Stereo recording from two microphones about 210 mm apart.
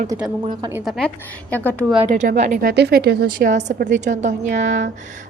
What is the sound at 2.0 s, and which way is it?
Speech, 35° right (ahead or behind).